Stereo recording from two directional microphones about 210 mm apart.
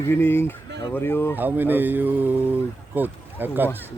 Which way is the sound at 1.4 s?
10° right (ahead or behind).